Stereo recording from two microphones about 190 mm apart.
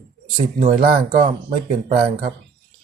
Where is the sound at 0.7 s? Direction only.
45° right (ahead or behind).